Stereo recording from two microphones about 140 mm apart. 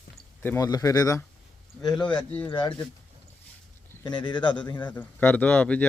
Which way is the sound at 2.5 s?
35° left (ahead or behind).